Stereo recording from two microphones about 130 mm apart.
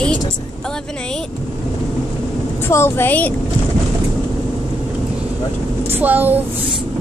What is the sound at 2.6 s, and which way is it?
Speech, 20° left (ahead or behind).